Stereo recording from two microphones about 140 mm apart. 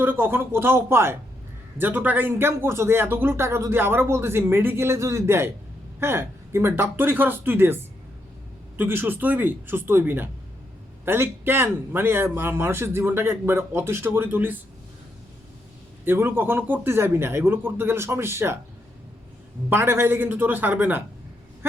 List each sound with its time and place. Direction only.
0.0 s speech: 15° right (ahead or behind)
8.8 s speech: 15° right (ahead or behind)
16.0 s speech: 15° right (ahead or behind)
19.7 s speech: 15° right (ahead or behind)